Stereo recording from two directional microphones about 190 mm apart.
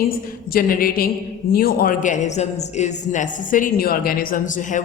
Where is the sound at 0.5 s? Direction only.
50° left (ahead or behind).